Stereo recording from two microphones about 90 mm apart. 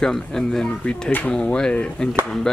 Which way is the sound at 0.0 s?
5° left (ahead or behind).